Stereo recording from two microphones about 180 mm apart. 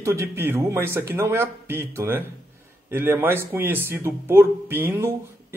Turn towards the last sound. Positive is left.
turn(degrees=-10)  # may be behind; listen again after turning